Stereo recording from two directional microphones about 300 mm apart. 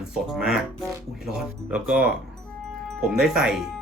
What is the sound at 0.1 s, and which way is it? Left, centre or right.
Speech, centre.